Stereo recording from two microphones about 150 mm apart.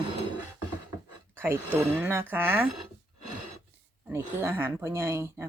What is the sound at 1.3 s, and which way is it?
Speech, 15° right (ahead or behind).